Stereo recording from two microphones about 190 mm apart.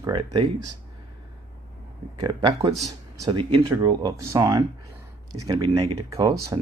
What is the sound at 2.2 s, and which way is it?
Speech, 25° right (ahead or behind).